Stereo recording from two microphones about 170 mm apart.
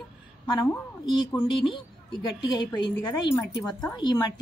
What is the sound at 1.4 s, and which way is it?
A woman's voice, 30° left (ahead or behind).